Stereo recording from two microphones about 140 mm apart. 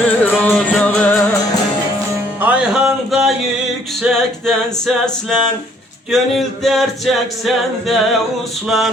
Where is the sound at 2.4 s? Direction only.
10° right (ahead or behind).